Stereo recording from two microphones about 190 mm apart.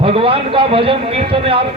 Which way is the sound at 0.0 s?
30° right (ahead or behind).